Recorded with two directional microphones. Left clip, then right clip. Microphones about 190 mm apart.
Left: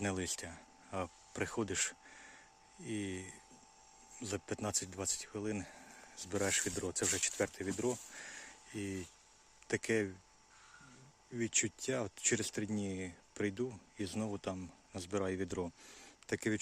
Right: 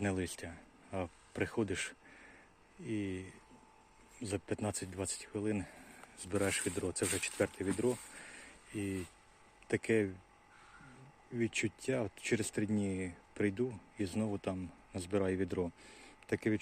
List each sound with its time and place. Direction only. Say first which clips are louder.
0.0 s speech: right 1 dB; 10° left (ahead or behind)
11.3 s speech: right 1 dB; 10° left (ahead or behind)